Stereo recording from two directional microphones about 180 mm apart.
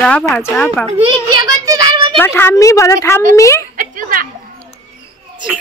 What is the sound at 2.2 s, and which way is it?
Speech, 10° left (ahead or behind).